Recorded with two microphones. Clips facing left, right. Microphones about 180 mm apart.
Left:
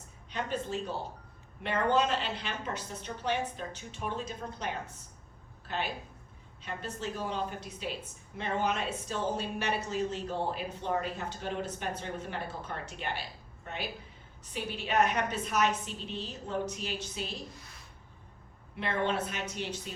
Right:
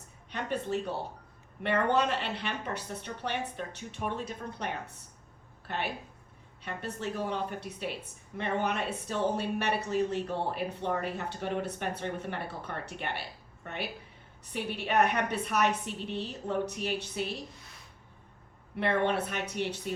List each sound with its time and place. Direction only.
0.3 s a woman's voice: 65° right (ahead or behind)
18.8 s a woman's voice: 65° right (ahead or behind)